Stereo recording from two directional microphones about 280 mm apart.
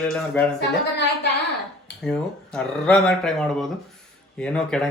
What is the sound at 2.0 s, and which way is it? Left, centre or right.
Speech, centre.